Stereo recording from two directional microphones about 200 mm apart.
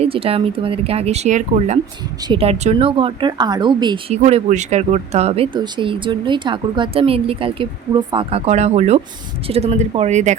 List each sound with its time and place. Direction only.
0.0 s speech: 30° right (ahead or behind)
4.2 s speech: 35° right (ahead or behind)